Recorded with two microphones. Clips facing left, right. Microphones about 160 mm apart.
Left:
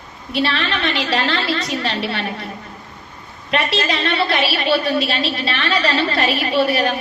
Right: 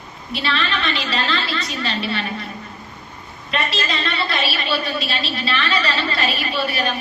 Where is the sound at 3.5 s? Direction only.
70° left (ahead or behind).